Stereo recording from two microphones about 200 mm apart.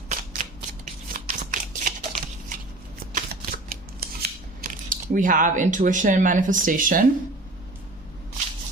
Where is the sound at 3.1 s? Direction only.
45° right (ahead or behind).